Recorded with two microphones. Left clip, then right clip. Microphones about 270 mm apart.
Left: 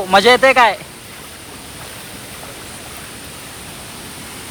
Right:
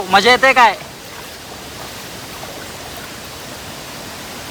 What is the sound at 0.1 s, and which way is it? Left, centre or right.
Speech, centre.